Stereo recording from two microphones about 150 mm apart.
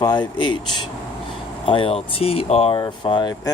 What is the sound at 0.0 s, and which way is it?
Speech, 30° left (ahead or behind).